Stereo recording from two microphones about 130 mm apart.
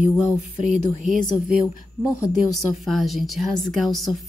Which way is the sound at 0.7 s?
70° right (ahead or behind).